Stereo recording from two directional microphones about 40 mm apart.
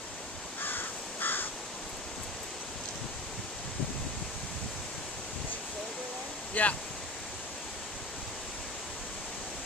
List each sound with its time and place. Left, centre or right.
0.6 s crow: left
6.5 s speech: left